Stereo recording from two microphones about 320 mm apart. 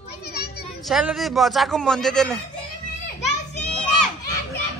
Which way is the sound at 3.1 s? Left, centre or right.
Left.